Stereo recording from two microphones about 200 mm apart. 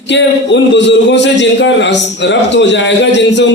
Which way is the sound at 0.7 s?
60° left (ahead or behind).